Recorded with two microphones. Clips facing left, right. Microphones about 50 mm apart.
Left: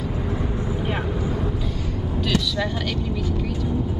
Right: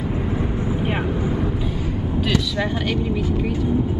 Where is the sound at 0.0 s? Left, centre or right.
Right.